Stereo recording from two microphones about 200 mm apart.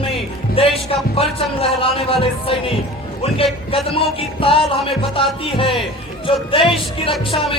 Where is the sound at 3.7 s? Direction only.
25° left (ahead or behind).